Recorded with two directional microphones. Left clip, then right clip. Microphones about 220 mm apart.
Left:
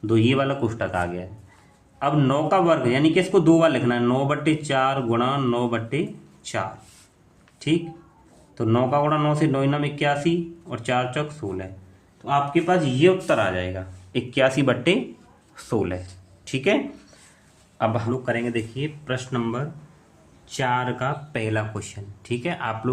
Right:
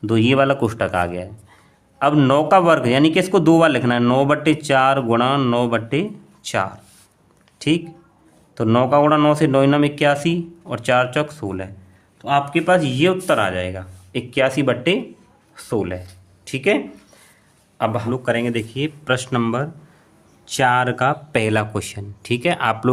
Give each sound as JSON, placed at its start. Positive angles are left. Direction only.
{"t": 0.0, "sound": "a man's voice", "side_deg": -45}
{"t": 18.1, "sound": "a man's voice", "side_deg": -45}